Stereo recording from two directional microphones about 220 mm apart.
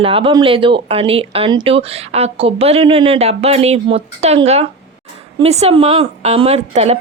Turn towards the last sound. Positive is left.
turn(degrees=-30)  # may be behind; listen again after turning